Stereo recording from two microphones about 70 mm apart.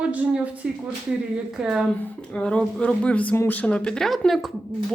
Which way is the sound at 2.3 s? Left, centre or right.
Centre.